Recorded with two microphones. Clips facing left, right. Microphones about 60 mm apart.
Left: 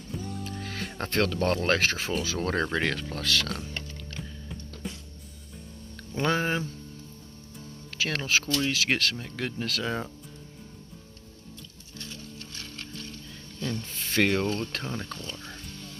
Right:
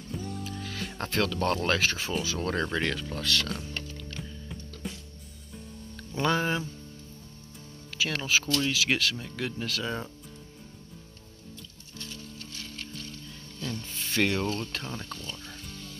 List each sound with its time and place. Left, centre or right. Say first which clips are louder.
0.1 s music: even; centre
0.4 s music: left 1 dB; left
1.1 s speech: left 2 dB; left
3.2 s speech: left 1 dB; left
3.4 s speech: left 1 dB; centre
4.1 s music: even; centre
6.2 s speech: even; left
8.0 s speech: even; left
9.7 s speech: left 2 dB; left
13.9 s a sound: left 2 dB; left
14.4 s speech: left 2 dB; left
14.8 s speech: left 3 dB; left